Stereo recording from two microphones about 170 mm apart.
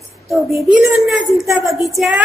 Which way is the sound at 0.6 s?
Centre (ahead or behind).